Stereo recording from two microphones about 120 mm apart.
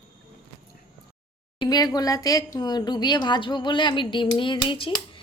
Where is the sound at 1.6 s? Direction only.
35° left (ahead or behind).